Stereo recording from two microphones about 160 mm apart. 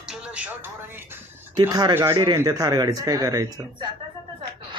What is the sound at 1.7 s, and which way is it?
A man's voice, 25° right (ahead or behind).